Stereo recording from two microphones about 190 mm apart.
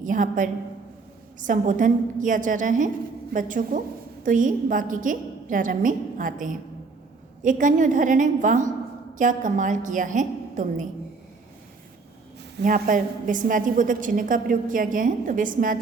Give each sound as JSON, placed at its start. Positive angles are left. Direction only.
{"t": 0.0, "sound": "a woman's voice", "side_deg": -45}
{"t": 12.6, "sound": "a woman's voice", "side_deg": -45}